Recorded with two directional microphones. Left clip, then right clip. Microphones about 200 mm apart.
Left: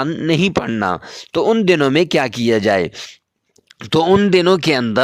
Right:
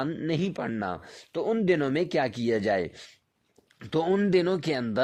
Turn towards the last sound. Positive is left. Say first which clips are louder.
# left 13 dB
turn(degrees=45)  # may be behind; listen again after turning